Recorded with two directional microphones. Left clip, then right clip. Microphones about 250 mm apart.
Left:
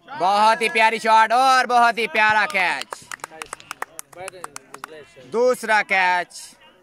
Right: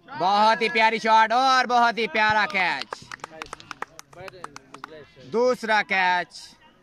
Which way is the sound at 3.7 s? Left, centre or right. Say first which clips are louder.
Left 4 dB; left.